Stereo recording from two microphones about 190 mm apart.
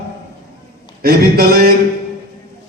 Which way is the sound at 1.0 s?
55° right (ahead or behind).